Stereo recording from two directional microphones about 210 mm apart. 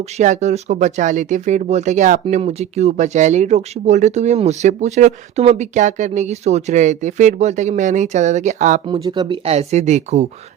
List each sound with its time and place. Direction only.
0.2 s speech: 35° right (ahead or behind)
8.9 s speech: 20° right (ahead or behind)